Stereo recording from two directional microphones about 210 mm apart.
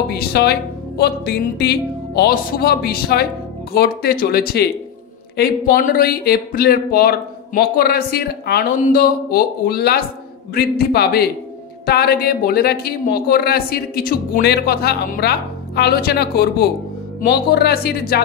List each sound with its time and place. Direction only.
0.1 s speech: 50° left (ahead or behind)